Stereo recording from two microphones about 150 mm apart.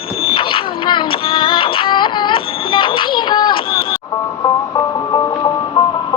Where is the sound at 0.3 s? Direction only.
35° left (ahead or behind).